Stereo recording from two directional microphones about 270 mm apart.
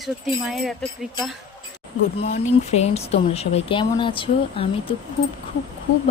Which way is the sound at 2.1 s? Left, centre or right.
Left.